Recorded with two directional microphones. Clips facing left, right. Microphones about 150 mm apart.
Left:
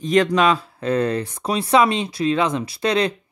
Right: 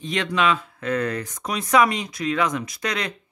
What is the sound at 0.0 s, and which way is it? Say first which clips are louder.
Speech: left 6 dB; 40° left (ahead or behind).